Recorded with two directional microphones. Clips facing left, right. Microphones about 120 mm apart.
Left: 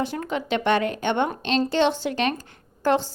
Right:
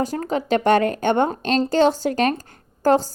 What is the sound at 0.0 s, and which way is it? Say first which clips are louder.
Speech: right 4 dB; 40° right (ahead or behind).